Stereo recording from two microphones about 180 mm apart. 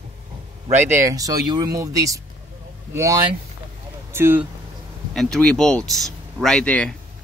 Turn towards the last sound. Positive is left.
turn(degrees=5)  # may be behind; listen again after turning